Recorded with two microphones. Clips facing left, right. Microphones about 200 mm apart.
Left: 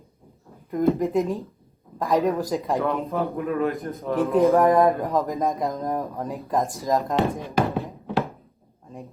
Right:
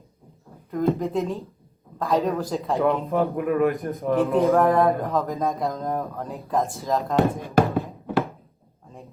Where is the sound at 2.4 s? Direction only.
15° left (ahead or behind).